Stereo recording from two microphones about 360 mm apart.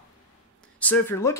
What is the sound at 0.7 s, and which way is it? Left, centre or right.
Speech, centre.